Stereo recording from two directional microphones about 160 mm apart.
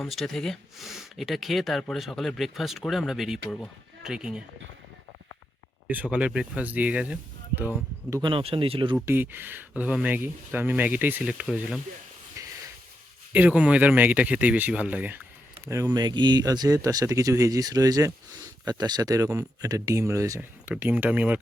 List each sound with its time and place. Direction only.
0.0 s speech: centre (ahead or behind)
5.9 s speech: 10° right (ahead or behind)
8.1 s speech: 30° right (ahead or behind)
9.0 s speech: 15° right (ahead or behind)
12.4 s a sound: 20° right (ahead or behind)
13.3 s speech: 10° right (ahead or behind)